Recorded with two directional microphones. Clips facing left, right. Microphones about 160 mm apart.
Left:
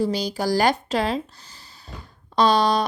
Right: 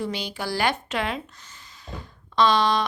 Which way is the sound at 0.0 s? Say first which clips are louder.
Left 6 dB; 40° left (ahead or behind).